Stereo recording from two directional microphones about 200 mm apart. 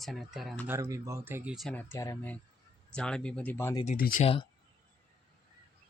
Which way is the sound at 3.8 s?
40° left (ahead or behind).